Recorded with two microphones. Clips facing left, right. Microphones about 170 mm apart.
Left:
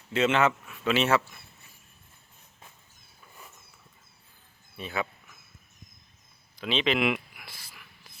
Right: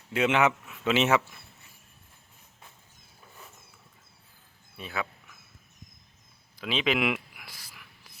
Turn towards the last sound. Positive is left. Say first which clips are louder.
# even
turn(degrees=-10)  # may be behind; listen again after turning